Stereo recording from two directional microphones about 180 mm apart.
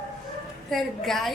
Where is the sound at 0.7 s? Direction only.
Centre (ahead or behind).